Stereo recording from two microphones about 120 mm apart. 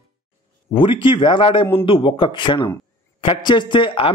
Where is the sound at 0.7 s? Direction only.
45° left (ahead or behind).